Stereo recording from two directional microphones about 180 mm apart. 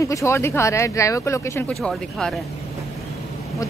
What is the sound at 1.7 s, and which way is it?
Speech, centre (ahead or behind).